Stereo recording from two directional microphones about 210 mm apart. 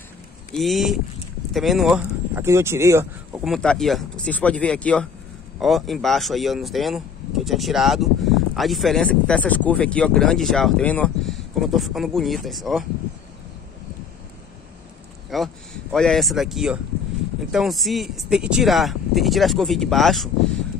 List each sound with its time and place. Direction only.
0.6 s speech: centre (ahead or behind)
3.4 s speech: centre (ahead or behind)
15.2 s speech: centre (ahead or behind)